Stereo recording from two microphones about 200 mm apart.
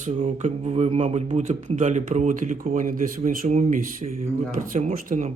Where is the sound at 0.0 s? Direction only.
35° right (ahead or behind).